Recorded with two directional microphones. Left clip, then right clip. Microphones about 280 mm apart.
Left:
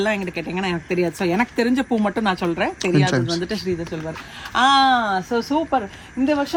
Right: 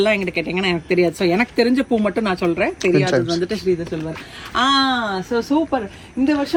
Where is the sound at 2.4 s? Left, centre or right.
Centre.